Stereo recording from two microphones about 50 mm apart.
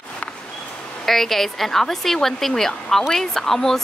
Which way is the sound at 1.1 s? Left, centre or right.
Centre.